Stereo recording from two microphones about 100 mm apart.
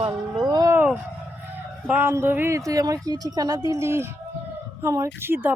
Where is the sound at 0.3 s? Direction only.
45° right (ahead or behind).